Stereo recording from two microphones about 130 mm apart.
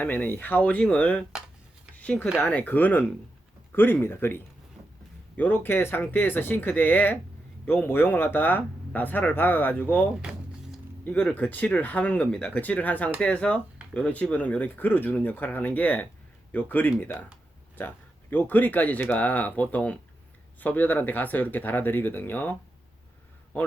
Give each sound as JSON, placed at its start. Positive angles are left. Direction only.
{"t": 0.0, "sound": "speech", "side_deg": 15}
{"t": 5.4, "sound": "speech", "side_deg": 15}
{"t": 10.2, "sound": "a sound", "side_deg": -5}
{"t": 11.0, "sound": "speech", "side_deg": 10}
{"t": 23.5, "sound": "a man's voice", "side_deg": 15}